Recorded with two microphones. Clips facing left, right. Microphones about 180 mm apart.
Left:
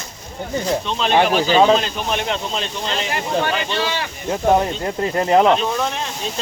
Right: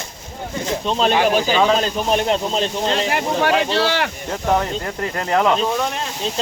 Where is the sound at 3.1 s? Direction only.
75° right (ahead or behind).